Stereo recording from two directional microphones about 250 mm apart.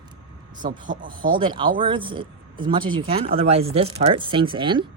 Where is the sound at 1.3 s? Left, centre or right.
Centre.